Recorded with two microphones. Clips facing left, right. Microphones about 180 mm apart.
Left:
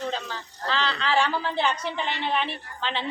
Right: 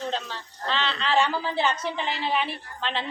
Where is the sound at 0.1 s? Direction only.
Centre (ahead or behind).